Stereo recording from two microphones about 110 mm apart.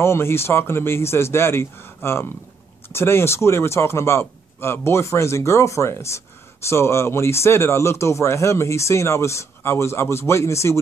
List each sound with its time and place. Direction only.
0.0 s a man's voice: 25° left (ahead or behind)